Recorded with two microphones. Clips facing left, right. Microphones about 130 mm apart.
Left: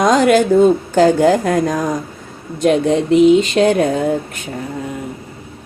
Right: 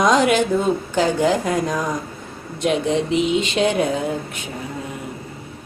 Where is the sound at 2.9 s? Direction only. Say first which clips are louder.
Left 12 dB; 45° left (ahead or behind).